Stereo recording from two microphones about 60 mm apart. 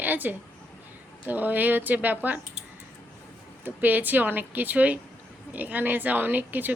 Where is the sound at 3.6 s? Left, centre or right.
Right.